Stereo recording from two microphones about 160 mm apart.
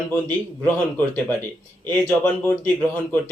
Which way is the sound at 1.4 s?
10° left (ahead or behind).